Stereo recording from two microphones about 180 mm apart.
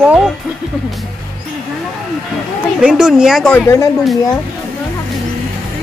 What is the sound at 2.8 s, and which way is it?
Speech, 5° right (ahead or behind).